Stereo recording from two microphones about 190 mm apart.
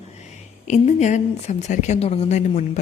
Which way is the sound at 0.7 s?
35° left (ahead or behind).